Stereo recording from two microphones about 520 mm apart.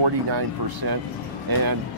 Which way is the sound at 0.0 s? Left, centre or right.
Right.